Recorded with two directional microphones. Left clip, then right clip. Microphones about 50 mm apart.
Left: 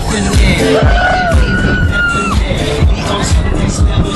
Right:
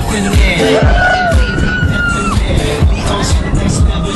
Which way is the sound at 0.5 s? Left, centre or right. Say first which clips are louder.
Right 1 dB; right.